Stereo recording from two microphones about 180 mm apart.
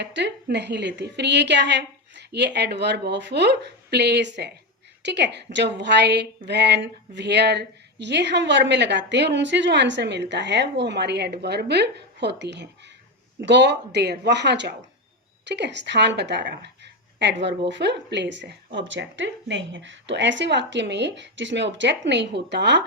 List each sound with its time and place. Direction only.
0.0 s a woman's voice: 75° right (ahead or behind)